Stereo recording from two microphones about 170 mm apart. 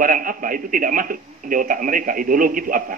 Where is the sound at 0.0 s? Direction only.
55° right (ahead or behind).